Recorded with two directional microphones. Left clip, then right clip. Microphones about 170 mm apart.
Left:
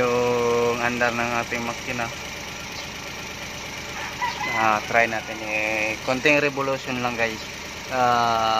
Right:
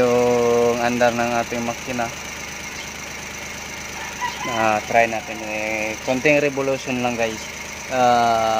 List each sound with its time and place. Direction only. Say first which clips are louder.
0.0 s engine: right 4 dB; 20° right (ahead or behind)
0.8 s speech: right 4 dB; 30° right (ahead or behind)
4.6 s speech: right 3 dB; 40° right (ahead or behind)
6.2 s speech: right 2 dB; 35° right (ahead or behind)
7.9 s a sound: right 4 dB; 25° right (ahead or behind)